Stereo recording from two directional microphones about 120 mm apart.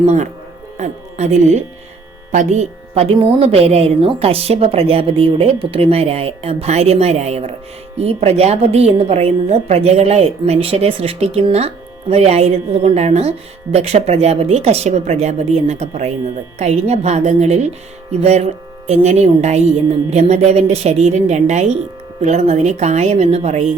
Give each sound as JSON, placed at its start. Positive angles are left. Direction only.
{"t": 0.0, "sound": "a woman's voice", "side_deg": -75}